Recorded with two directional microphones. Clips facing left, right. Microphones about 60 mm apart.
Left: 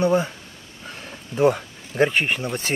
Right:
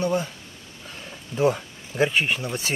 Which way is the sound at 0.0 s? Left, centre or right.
Left.